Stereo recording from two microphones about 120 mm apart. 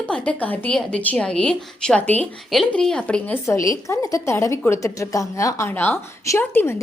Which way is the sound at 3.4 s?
25° left (ahead or behind).